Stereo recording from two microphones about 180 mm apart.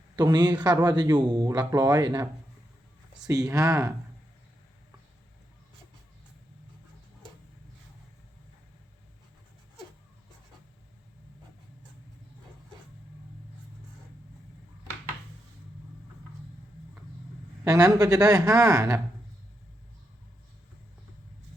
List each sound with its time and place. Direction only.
0.2 s speech: 25° right (ahead or behind)
17.7 s speech: 20° right (ahead or behind)